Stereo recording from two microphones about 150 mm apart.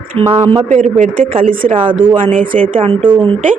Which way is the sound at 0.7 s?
55° right (ahead or behind).